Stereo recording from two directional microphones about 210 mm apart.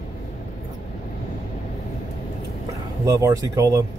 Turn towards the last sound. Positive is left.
turn(degrees=-15)  # may be behind; listen again after turning